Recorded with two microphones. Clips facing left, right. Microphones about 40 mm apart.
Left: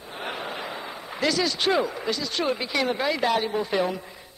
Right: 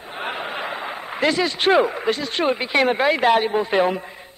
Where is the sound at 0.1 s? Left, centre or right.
Right.